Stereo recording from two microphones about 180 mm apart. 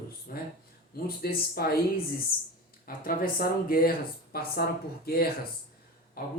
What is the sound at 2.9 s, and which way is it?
Speech, 55° left (ahead or behind).